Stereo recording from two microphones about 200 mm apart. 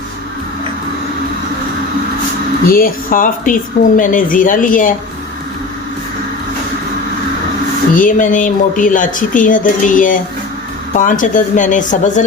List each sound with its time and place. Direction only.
2.6 s a woman's voice: 45° left (ahead or behind)
7.9 s speech: 40° left (ahead or behind)